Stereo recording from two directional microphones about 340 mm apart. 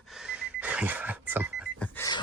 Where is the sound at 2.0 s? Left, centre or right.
Centre.